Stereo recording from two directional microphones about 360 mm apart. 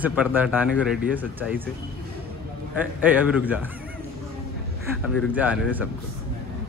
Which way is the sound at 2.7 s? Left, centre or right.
Centre.